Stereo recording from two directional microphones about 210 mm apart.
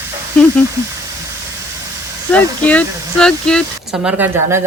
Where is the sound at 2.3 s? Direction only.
5° left (ahead or behind).